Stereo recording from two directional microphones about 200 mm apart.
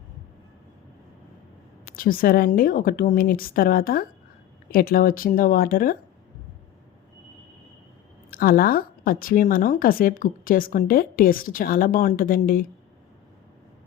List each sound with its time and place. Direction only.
2.0 s speech: 45° left (ahead or behind)
8.3 s speech: 45° left (ahead or behind)